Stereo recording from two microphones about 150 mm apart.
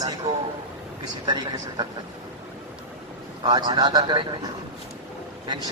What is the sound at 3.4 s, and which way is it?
A man's voice, 30° right (ahead or behind).